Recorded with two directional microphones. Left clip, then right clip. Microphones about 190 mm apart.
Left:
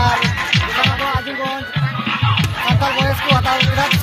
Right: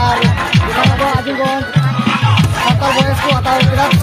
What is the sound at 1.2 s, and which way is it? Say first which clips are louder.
Music: right 6 dB; 65° right (ahead or behind).